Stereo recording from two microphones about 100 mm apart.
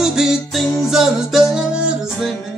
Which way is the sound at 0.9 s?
5° right (ahead or behind).